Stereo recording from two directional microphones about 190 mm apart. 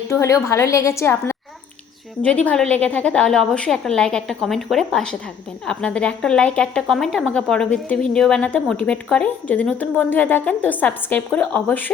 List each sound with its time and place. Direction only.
0.1 s a woman's voice: 15° left (ahead or behind)